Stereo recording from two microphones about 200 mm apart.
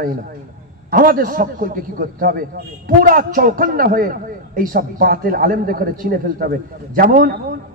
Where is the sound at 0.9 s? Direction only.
45° right (ahead or behind).